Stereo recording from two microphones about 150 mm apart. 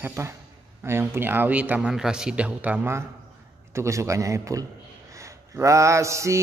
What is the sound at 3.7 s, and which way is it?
Mantra, 20° right (ahead or behind).